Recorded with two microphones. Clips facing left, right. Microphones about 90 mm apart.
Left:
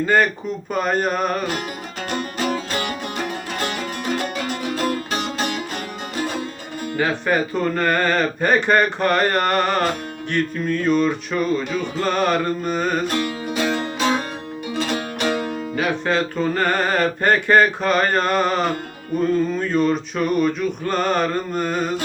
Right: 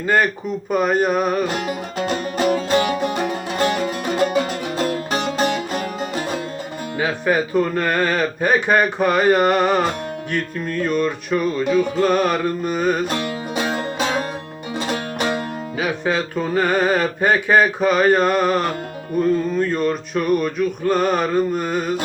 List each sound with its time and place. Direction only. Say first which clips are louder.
0.0 s speech: even; 5° right (ahead or behind)
0.7 s music: right 3 dB; 10° right (ahead or behind)
2.4 s music: right 8 dB; 30° right (ahead or behind)
6.9 s music: right 1 dB; 10° right (ahead or behind)
13.1 s music: left 1 dB; 30° right (ahead or behind)
14.8 s music: right 1 dB; 35° right (ahead or behind)
15.7 s music: even; 10° right (ahead or behind)